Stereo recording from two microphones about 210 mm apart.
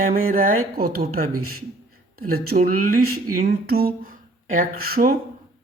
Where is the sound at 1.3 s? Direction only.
90° right.